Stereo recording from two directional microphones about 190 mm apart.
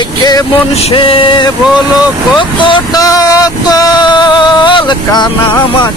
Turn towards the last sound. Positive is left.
turn(degrees=25)  # may be behind; listen again after turning